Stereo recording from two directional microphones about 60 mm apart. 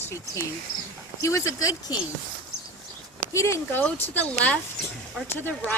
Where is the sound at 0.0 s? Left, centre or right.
Left.